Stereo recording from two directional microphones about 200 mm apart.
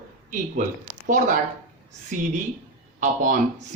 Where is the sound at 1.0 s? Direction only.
40° right (ahead or behind).